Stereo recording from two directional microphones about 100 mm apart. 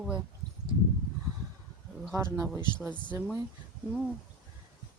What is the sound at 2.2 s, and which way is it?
Speech, 30° right (ahead or behind).